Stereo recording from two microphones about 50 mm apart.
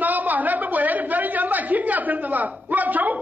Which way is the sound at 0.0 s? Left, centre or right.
Right.